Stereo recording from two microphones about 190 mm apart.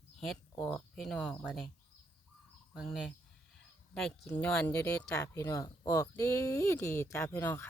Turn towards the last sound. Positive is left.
turn(degrees=10)  # may be behind; listen again after turning